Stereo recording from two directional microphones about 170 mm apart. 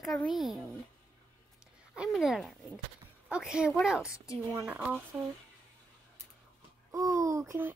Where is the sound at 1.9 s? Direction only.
5° right (ahead or behind).